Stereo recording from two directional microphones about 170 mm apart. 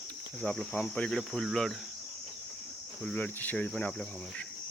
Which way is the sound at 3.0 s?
10° left (ahead or behind).